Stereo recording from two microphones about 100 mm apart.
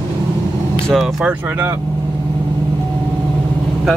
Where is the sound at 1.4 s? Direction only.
25° right (ahead or behind).